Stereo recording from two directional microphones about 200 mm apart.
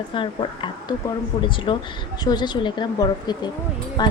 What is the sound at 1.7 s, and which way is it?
Speech, 25° left (ahead or behind).